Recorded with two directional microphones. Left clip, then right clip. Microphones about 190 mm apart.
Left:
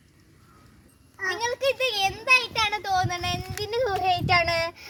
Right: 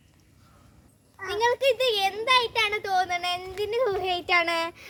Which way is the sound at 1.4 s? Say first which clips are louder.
Right 4 dB; 15° right (ahead or behind).